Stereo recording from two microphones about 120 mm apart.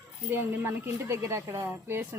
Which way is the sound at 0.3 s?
20° right (ahead or behind).